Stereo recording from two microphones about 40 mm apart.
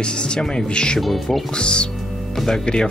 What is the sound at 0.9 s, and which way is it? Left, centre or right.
Music, centre.